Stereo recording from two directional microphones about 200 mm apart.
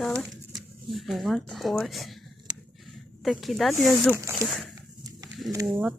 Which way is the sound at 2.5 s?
20° right (ahead or behind).